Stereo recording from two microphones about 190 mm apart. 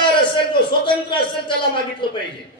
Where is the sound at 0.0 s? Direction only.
25° left (ahead or behind).